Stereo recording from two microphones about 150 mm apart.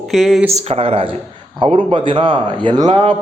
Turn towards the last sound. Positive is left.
turn(degrees=-30)  # may be behind; listen again after turning